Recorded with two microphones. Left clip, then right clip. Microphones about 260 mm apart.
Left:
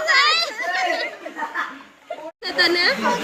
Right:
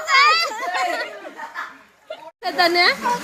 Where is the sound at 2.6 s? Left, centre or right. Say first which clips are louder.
Right 1 dB; right.